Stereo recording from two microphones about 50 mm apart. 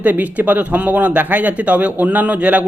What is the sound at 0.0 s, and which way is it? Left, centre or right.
Speech, right.